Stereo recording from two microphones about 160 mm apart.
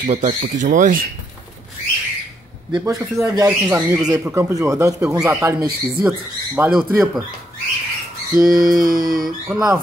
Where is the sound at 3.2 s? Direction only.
10° right (ahead or behind).